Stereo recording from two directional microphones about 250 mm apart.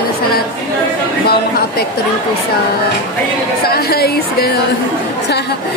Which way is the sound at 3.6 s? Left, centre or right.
Left.